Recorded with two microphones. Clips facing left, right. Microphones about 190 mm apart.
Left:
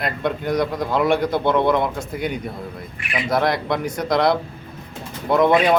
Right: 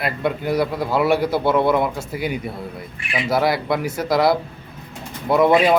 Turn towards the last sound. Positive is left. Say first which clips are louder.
# right 1 dB
turn(degrees=-5)  # may be behind; listen again after turning